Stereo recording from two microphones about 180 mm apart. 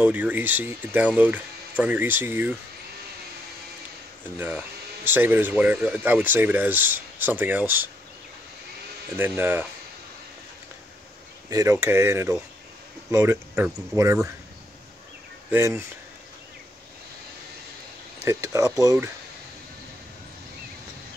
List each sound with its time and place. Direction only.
0.0 s speech: 10° right (ahead or behind)
4.4 s speech: 10° right (ahead or behind)
9.3 s speech: 10° right (ahead or behind)
11.5 s speech: 15° right (ahead or behind)
15.5 s speech: 15° right (ahead or behind)
18.2 s speech: 15° right (ahead or behind)